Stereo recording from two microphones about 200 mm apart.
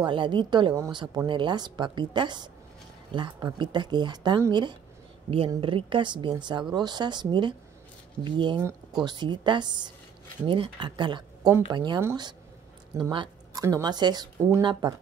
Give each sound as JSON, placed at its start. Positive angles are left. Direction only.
{"t": 0.0, "sound": "a woman's voice", "side_deg": -25}